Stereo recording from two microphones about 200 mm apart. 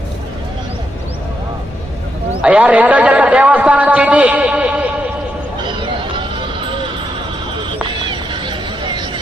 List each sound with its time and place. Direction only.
2.4 s a man's voice: 5° right (ahead or behind)
5.8 s a sound: 25° right (ahead or behind)
7.9 s horse: 25° right (ahead or behind)